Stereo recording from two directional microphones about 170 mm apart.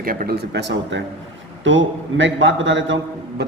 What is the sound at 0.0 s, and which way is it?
A man's voice, 55° right (ahead or behind).